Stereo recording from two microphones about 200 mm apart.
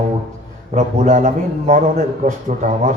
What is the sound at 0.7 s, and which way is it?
A man's voice, 35° right (ahead or behind).